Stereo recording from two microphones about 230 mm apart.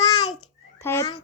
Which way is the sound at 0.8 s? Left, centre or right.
Centre.